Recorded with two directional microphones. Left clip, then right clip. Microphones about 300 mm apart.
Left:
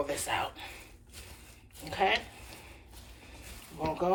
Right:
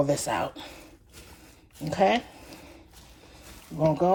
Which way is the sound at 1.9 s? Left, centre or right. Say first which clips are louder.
Right 6 dB; centre.